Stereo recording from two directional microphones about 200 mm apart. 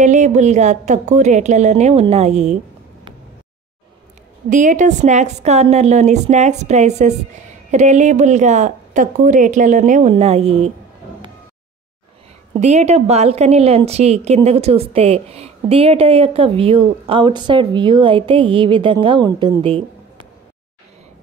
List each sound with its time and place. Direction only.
0.0 s a woman's voice: 35° right (ahead or behind)
4.5 s a woman's voice: 40° right (ahead or behind)
12.5 s a woman's voice: 35° right (ahead or behind)